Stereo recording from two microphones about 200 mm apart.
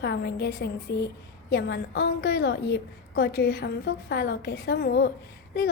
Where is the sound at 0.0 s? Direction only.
55° left (ahead or behind).